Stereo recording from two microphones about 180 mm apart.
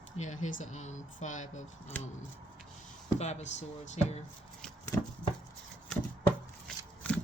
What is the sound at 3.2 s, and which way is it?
Speech, 40° left (ahead or behind).